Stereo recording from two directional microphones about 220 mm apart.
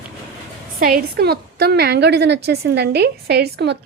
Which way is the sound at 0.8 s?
40° right (ahead or behind).